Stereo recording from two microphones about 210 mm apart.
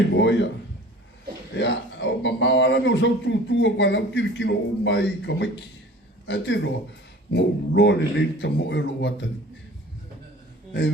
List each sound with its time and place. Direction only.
0.1 s speech: 55° left (ahead or behind)
1.5 s a man's voice: 60° left (ahead or behind)